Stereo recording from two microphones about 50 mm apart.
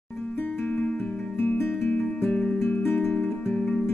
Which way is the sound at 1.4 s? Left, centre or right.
Left.